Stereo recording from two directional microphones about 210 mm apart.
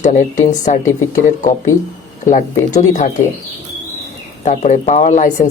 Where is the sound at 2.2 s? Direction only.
35° left (ahead or behind).